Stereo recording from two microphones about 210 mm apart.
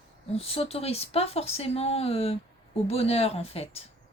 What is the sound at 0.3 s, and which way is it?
A woman's voice, 30° left (ahead or behind).